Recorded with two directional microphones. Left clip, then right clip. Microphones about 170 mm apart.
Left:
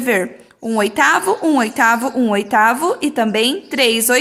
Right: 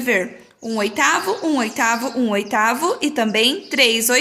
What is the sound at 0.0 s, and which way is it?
A woman's voice, 35° left (ahead or behind).